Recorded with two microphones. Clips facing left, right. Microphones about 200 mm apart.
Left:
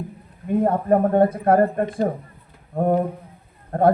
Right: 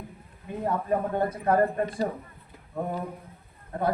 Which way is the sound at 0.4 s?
55° left (ahead or behind).